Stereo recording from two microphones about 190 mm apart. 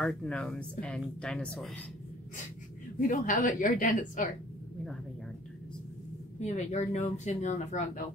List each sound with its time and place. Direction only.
0.0 s speech: 5° left (ahead or behind)
3.1 s a woman's voice: 45° left (ahead or behind)
6.4 s speech: 40° left (ahead or behind)